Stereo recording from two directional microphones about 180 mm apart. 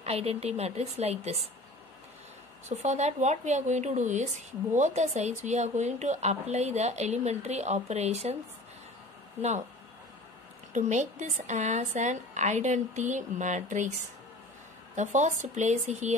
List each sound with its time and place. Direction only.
0.0 s a woman's voice: 35° right (ahead or behind)
2.7 s a woman's voice: 40° right (ahead or behind)
10.7 s a woman's voice: 40° right (ahead or behind)
15.0 s a woman's voice: 40° right (ahead or behind)